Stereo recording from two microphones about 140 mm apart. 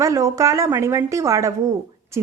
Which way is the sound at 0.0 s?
25° right (ahead or behind).